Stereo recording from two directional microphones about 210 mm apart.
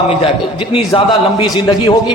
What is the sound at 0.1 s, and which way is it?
A man's voice, 25° left (ahead or behind).